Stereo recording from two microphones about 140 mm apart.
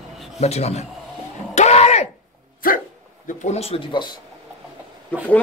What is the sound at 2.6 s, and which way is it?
Dog, 90° left.